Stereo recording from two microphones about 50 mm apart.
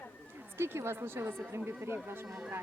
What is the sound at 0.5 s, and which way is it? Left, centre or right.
A woman's voice, right.